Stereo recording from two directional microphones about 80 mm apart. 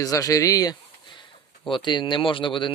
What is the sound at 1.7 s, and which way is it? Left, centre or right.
Speech, left.